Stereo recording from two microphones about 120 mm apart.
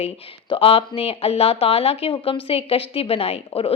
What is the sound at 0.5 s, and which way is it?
Speech, 50° left (ahead or behind).